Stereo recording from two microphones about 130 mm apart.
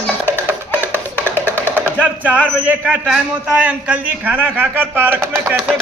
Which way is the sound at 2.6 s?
10° right (ahead or behind).